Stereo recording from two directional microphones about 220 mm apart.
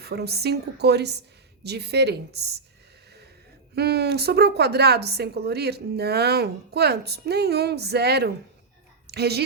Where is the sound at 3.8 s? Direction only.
50° right (ahead or behind).